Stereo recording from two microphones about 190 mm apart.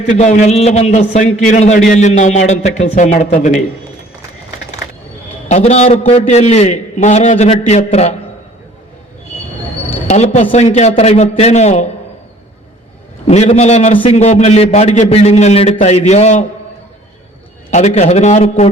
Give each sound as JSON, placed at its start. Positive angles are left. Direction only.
{"t": 0.0, "sound": "a man's voice", "side_deg": 35}
{"t": 5.5, "sound": "a man's voice", "side_deg": 35}
{"t": 10.1, "sound": "a man's voice", "side_deg": 35}
{"t": 13.2, "sound": "a man's voice", "side_deg": 35}
{"t": 17.7, "sound": "a man's voice", "side_deg": 35}